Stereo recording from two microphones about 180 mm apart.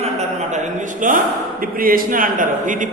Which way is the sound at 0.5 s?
45° right (ahead or behind).